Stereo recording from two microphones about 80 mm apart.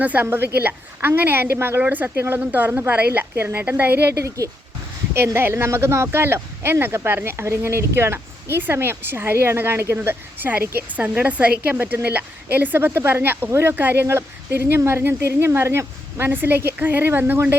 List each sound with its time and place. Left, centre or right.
0.0 s speech: right
1.8 s speech: centre
5.1 s speech: right